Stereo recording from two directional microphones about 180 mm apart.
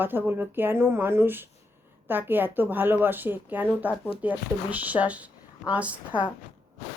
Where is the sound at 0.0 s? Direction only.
10° right (ahead or behind).